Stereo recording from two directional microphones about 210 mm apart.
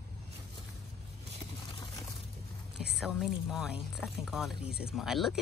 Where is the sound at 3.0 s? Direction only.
Centre (ahead or behind).